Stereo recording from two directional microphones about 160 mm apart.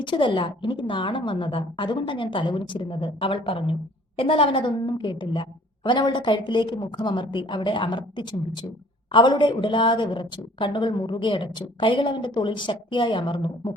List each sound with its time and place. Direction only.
0.0 s a woman's voice: 30° left (ahead or behind)